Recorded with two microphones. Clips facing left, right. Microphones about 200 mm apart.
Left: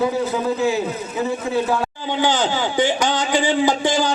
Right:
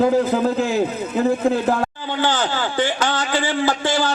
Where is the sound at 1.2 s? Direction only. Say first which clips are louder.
Right 4 dB; 55° right (ahead or behind).